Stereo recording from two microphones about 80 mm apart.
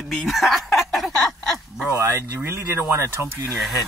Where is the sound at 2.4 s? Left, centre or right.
Right.